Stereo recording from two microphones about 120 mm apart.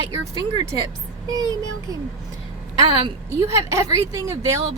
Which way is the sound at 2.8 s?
40° right (ahead or behind).